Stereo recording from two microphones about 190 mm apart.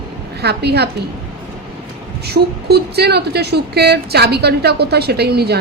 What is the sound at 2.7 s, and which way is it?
A woman's voice, 60° right (ahead or behind).